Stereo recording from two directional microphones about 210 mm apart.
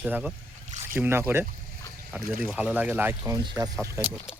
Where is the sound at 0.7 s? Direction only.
35° right (ahead or behind).